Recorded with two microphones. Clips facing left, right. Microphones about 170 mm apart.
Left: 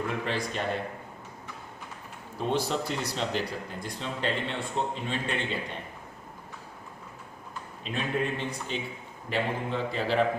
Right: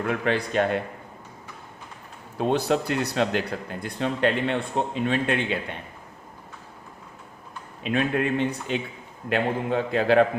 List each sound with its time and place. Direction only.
0.0 s speech: 60° right (ahead or behind)
2.4 s speech: 60° right (ahead or behind)
7.9 s speech: 65° right (ahead or behind)